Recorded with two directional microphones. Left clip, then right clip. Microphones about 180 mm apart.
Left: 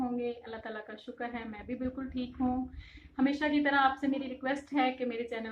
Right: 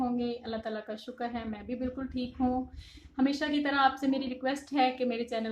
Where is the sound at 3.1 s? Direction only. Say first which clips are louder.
Even; 65° right (ahead or behind).